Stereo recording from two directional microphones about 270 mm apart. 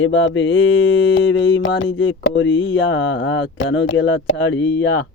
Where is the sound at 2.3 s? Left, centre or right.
Left.